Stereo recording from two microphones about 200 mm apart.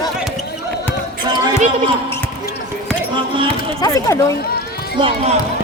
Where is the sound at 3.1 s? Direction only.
25° right (ahead or behind).